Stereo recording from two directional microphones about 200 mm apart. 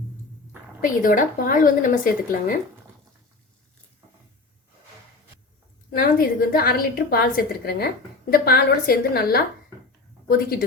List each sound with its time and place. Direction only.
0.8 s a woman's voice: 45° left (ahead or behind)
5.9 s a woman's voice: 45° left (ahead or behind)